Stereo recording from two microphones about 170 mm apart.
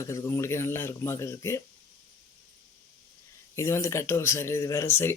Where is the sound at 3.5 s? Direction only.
15° left (ahead or behind).